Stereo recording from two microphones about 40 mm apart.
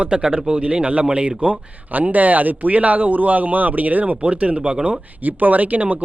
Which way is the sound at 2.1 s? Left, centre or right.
Right.